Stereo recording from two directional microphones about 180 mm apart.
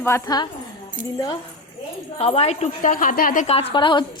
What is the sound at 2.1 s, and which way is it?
A woman's voice, 35° left (ahead or behind).